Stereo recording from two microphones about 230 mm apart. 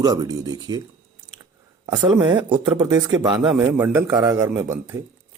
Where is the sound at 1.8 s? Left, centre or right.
Centre.